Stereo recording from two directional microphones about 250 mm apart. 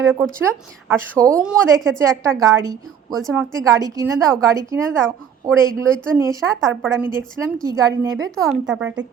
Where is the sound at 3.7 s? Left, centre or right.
Centre.